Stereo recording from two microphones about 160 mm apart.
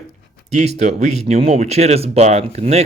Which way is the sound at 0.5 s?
45° right (ahead or behind).